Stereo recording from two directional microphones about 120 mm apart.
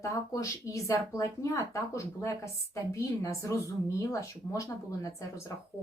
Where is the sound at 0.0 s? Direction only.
25° left (ahead or behind).